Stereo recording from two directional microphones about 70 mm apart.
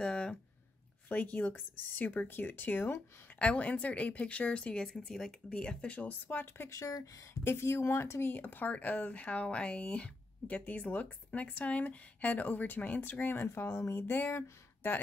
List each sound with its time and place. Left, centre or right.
0.0 s speech: centre
1.0 s speech: left
3.3 s speech: centre
6.7 s speech: left
7.4 s speech: left